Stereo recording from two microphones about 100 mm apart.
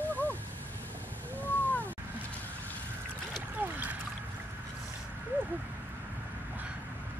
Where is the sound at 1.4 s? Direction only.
15° left (ahead or behind).